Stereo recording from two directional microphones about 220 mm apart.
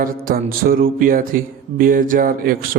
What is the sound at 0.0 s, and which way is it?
A man's voice, 40° right (ahead or behind).